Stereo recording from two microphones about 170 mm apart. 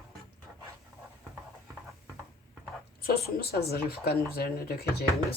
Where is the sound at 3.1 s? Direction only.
65° left (ahead or behind).